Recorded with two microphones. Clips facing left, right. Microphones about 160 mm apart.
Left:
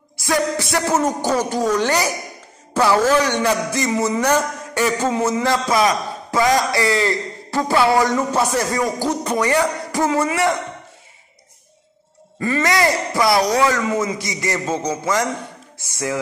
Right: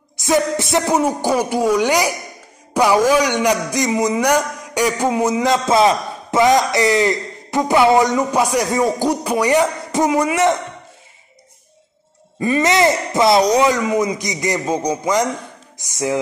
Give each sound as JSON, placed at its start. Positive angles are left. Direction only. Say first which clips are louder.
{"t": 0.2, "sound": "a man's voice", "louder": "right 3 dB", "side_deg": -20}
{"t": 8.7, "sound": "music", "louder": "right 4 dB", "side_deg": -25}
{"t": 9.1, "sound": "a man's voice", "louder": "right 3 dB", "side_deg": -10}
{"t": 12.4, "sound": "a man's voice", "louder": "right 3 dB", "side_deg": -20}